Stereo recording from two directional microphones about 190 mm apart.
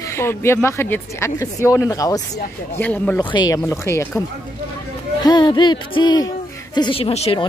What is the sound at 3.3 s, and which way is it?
A woman's voice, 20° left (ahead or behind).